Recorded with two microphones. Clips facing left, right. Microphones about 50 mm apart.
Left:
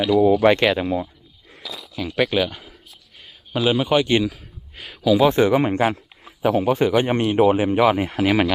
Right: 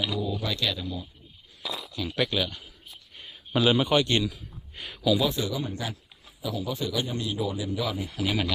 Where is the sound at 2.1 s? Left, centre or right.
Centre.